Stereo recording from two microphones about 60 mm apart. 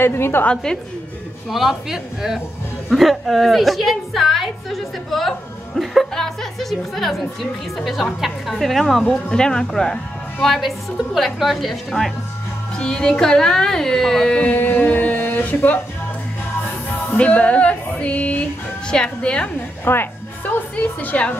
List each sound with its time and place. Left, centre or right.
0.0 s a woman's voice: left
1.5 s a woman's voice: centre
12.7 s a woman's voice: centre
14.5 s music: left
17.1 s music: left
19.8 s a woman's voice: left